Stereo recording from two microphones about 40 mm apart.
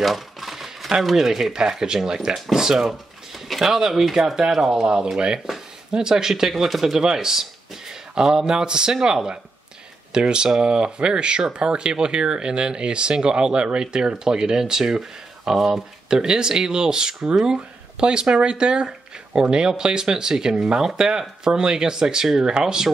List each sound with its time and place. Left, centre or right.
0.0 s typewriter: centre
1.0 s speech: centre
2.8 s a sound: centre
3.7 s speech: centre